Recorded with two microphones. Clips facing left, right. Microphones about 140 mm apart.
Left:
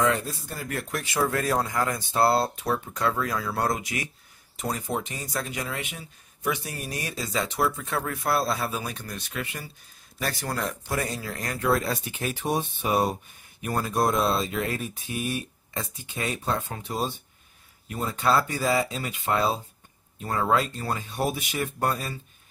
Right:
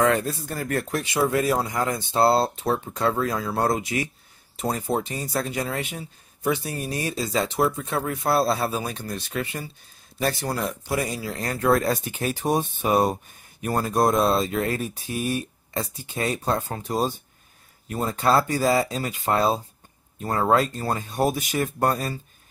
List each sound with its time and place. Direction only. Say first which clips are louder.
0.0 s speech: right 4 dB; 55° right (ahead or behind)
1.1 s speech: right 3 dB; 15° right (ahead or behind)
1.8 s speech: right 2 dB; 25° right (ahead or behind)
11.3 s speech: right 4 dB; 35° right (ahead or behind)